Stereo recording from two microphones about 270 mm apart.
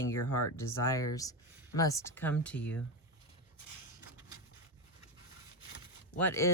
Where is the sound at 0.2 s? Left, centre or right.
Left.